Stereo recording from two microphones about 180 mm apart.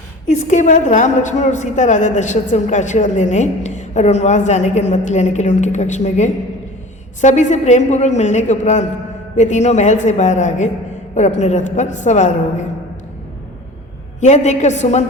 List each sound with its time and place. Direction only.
0.3 s a woman's voice: 45° left (ahead or behind)
14.2 s a woman's voice: 40° left (ahead or behind)